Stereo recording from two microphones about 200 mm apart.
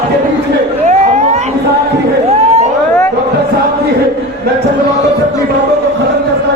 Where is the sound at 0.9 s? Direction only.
35° right (ahead or behind).